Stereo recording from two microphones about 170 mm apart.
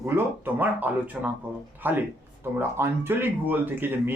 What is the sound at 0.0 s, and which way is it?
Speech, 10° right (ahead or behind).